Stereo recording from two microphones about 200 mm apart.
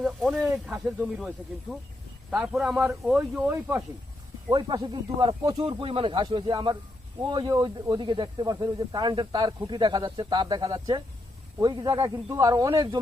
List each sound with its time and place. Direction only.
0.0 s a man's voice: centre (ahead or behind)
4.5 s speech: 20° right (ahead or behind)